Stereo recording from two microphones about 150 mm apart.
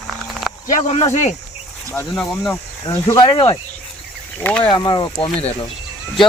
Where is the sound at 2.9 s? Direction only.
30° left (ahead or behind).